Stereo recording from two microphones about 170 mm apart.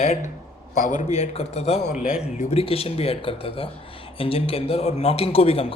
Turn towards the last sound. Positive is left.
turn(degrees=35)  # may be behind; listen again after turning